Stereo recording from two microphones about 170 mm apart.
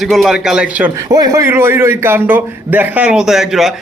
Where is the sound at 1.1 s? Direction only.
20° right (ahead or behind).